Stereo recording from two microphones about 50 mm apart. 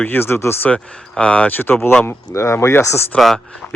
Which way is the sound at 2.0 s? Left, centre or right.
Left.